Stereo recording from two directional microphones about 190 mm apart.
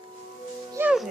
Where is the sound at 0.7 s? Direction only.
5° right (ahead or behind).